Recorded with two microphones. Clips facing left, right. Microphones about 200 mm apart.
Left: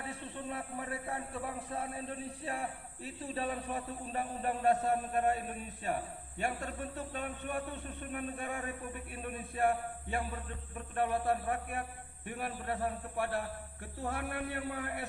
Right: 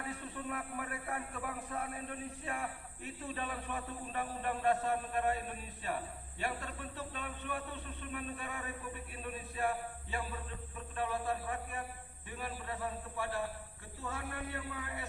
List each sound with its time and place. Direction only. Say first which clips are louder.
0.0 s a man's voice: even; 25° left (ahead or behind); by 15.0 s 60° left (ahead or behind)